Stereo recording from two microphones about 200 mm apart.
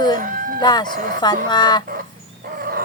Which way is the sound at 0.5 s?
20° left (ahead or behind).